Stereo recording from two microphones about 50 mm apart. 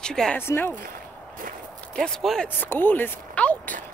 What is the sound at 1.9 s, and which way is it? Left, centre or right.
Speech, centre.